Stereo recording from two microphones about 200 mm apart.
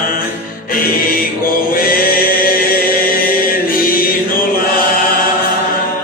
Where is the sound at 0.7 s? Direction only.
45° left (ahead or behind).